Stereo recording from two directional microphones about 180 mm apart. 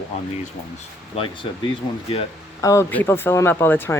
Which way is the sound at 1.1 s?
35° left (ahead or behind).